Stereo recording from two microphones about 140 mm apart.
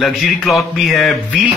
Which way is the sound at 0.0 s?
Centre (ahead or behind).